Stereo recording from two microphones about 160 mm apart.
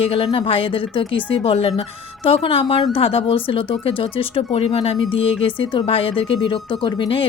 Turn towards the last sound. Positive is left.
turn(degrees=30)  # may be behind; listen again after turning